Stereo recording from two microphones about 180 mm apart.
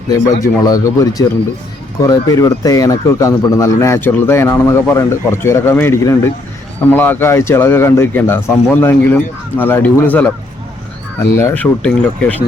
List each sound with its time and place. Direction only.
0.1 s speech: 20° left (ahead or behind)
11.3 s speech: 10° left (ahead or behind)